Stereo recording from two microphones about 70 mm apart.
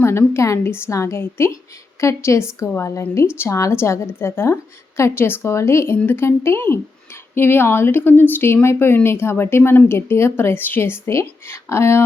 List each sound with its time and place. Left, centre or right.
0.0 s a woman's voice: left